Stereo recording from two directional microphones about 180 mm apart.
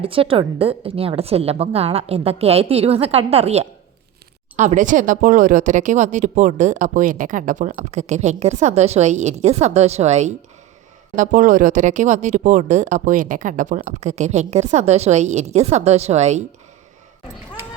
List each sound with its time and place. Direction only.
0.0 s speech: 30° right (ahead or behind)